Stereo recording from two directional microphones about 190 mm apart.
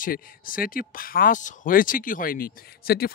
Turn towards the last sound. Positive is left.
turn(degrees=50)  # may be behind; listen again after turning